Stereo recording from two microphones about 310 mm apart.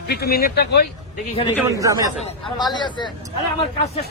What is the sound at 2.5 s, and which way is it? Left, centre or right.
Speech, centre.